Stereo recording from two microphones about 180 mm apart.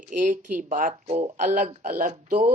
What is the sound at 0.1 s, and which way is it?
Speech, 45° right (ahead or behind).